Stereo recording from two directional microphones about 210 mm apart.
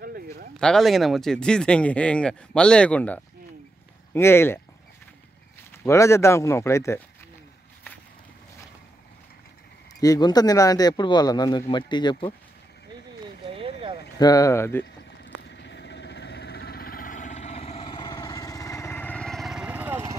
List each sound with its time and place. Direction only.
0.0 s a sound: 45° right (ahead or behind)
0.6 s speech: centre (ahead or behind)
5.9 s speech: 15° left (ahead or behind)
9.9 s speech: 15° left (ahead or behind)
13.6 s a sound: 25° right (ahead or behind)
14.1 s speech: 15° left (ahead or behind)
15.4 s vehicle: 55° left (ahead or behind); by 20.2 s 10° right (ahead or behind)